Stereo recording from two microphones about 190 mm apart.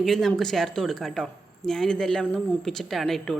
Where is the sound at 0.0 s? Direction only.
Centre (ahead or behind).